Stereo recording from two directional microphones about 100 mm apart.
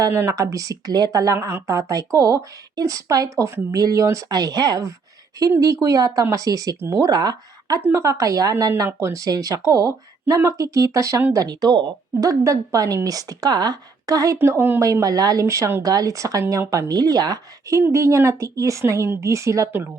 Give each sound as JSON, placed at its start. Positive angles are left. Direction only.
{"t": 0.1, "sound": "speech", "side_deg": -25}
{"t": 0.3, "sound": "speech", "side_deg": -35}
{"t": 7.1, "sound": "speech", "side_deg": -40}
{"t": 7.9, "sound": "speech", "side_deg": -30}
{"t": 8.9, "sound": "speech", "side_deg": -25}
{"t": 11.3, "sound": "speech", "side_deg": -45}
{"t": 14.3, "sound": "speech", "side_deg": -25}
{"t": 14.8, "sound": "speech", "side_deg": -35}